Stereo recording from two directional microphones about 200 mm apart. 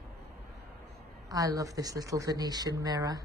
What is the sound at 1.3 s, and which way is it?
Speech, 15° right (ahead or behind).